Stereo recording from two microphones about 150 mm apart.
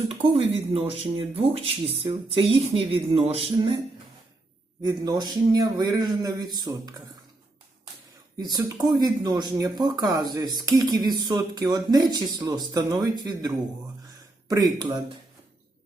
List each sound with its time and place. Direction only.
0.3 s speech: 40° right (ahead or behind)
4.8 s speech: 25° right (ahead or behind)
8.4 s speech: 25° right (ahead or behind)